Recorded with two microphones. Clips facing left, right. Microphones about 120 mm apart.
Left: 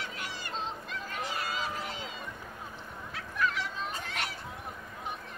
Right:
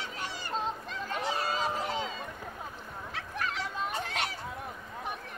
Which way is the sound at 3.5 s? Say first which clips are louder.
Right 2 dB; 35° right (ahead or behind).